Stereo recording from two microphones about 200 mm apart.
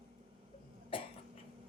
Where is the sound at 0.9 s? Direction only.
25° left (ahead or behind).